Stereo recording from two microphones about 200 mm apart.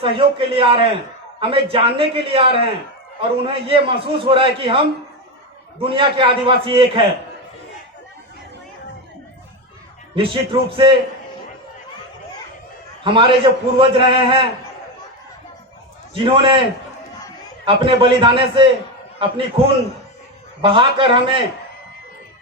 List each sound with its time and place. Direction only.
0.0 s a man's voice: 25° right (ahead or behind)
10.2 s a man's voice: 25° right (ahead or behind)
13.1 s a man's voice: 25° right (ahead or behind)
16.1 s a man's voice: 25° right (ahead or behind)
17.7 s a man's voice: 25° right (ahead or behind)